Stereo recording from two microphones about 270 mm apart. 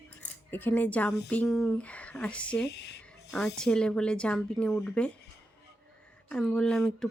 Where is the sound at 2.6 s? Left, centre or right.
Left.